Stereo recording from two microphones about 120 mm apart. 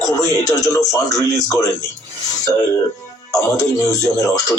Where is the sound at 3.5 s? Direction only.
30° left (ahead or behind).